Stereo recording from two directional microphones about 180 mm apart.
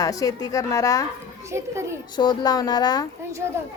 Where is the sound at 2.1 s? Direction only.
25° left (ahead or behind).